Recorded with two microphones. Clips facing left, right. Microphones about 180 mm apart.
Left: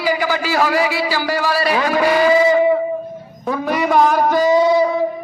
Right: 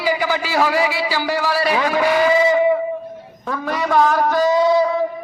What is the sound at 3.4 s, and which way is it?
A man's voice, 15° left (ahead or behind).